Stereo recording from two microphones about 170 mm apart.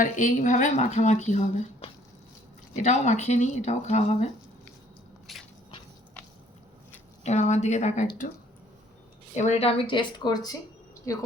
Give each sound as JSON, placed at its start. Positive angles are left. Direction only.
{"t": 0.0, "sound": "speech", "side_deg": 45}
{"t": 5.3, "sound": "a sound", "side_deg": 0}
{"t": 7.3, "sound": "speech", "side_deg": 40}
{"t": 9.3, "sound": "speech", "side_deg": 40}